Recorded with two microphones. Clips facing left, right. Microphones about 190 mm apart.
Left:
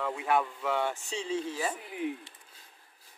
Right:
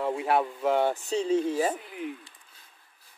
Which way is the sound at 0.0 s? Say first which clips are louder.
Right 3 dB; 35° right (ahead or behind).